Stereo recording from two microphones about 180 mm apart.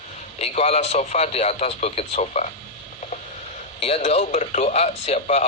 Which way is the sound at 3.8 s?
35° left (ahead or behind).